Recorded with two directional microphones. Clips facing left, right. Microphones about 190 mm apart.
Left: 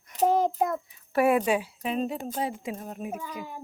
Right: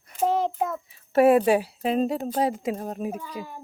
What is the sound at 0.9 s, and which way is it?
Speech, 25° right (ahead or behind).